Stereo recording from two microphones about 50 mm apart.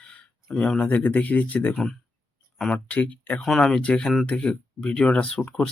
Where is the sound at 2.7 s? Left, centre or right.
Left.